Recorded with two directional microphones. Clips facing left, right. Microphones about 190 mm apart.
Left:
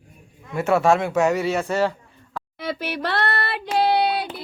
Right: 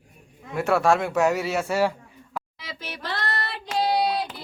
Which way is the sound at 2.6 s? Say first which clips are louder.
Left 10 dB; 60° left (ahead or behind).